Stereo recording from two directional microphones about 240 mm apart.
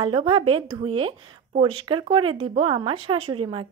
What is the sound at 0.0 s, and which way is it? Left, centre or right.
A woman's voice, right.